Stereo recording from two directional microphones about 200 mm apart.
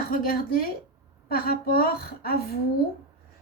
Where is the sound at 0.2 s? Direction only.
45° left (ahead or behind).